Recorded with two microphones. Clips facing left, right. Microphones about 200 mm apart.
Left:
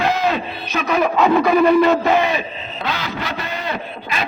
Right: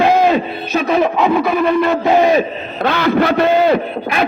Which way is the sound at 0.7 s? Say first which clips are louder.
Right 4 dB; 30° right (ahead or behind).